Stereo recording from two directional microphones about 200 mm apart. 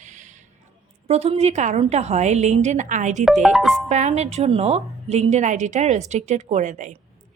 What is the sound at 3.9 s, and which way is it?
A woman's voice, 35° right (ahead or behind).